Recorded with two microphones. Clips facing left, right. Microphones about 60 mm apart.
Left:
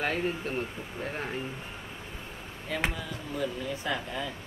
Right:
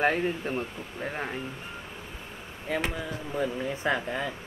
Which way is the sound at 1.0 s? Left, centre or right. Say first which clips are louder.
Right 2 dB; centre.